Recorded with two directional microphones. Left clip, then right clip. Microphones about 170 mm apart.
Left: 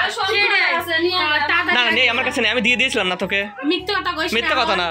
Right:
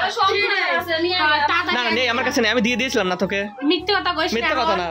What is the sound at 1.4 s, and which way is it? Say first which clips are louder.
Speech: left 1 dB; 60° right (ahead or behind).